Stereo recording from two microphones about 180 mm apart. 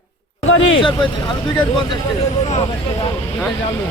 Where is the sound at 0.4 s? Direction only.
90° left.